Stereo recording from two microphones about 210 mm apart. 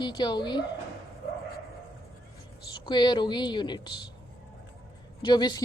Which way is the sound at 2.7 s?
20° left (ahead or behind).